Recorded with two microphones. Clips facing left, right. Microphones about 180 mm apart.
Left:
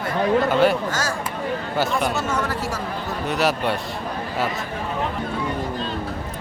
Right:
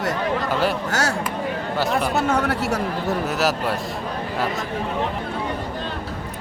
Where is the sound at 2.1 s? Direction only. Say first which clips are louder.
Right 4 dB; 60° right (ahead or behind).